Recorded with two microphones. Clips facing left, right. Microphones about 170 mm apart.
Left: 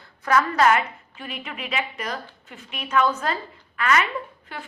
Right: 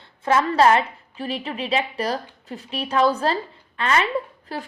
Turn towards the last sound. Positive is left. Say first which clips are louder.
# right 6 dB
turn(degrees=-35)  # may be behind; listen again after turning